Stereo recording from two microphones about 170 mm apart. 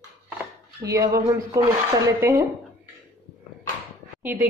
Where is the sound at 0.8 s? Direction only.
20° right (ahead or behind).